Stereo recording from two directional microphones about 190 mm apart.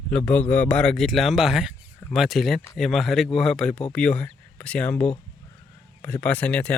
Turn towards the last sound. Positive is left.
turn(degrees=5)  # may be behind; listen again after turning